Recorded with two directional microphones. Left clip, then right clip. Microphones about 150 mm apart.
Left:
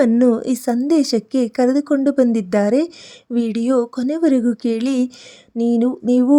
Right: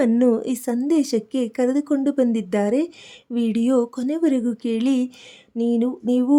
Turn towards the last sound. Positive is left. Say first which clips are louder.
# left 5 dB
turn(degrees=25)  # may be behind; listen again after turning